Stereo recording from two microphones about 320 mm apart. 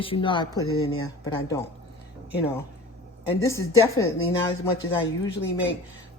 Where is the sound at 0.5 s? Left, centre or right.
Left.